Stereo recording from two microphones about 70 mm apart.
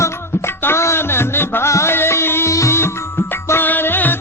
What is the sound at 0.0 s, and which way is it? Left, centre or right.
Music, left.